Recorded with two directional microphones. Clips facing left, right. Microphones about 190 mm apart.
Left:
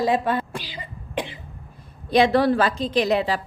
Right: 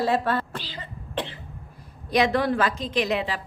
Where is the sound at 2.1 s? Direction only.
30° left (ahead or behind).